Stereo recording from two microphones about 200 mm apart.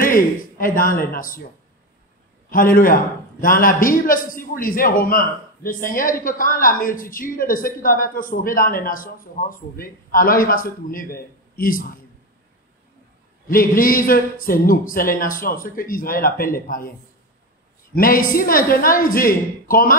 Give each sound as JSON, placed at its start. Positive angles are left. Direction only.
{"t": 0.0, "sound": "a man's voice", "side_deg": 45}
{"t": 2.5, "sound": "a man's voice", "side_deg": 45}
{"t": 13.5, "sound": "a man's voice", "side_deg": 45}
{"t": 17.9, "sound": "a man's voice", "side_deg": 45}